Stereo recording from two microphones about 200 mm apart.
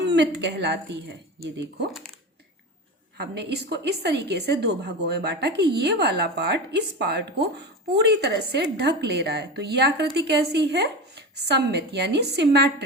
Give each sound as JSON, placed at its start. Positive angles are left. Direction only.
{"t": 0.0, "sound": "a woman's voice", "side_deg": -60}
{"t": 3.2, "sound": "a woman's voice", "side_deg": -55}